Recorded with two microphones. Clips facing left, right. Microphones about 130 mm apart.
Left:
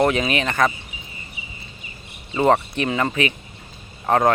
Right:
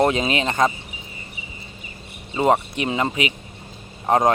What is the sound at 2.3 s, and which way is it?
Speech, 15° right (ahead or behind).